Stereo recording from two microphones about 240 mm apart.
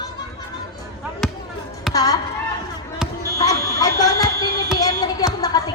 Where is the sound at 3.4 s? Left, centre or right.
Centre.